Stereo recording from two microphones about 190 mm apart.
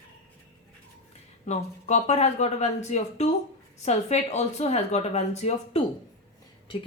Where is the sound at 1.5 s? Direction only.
35° left (ahead or behind).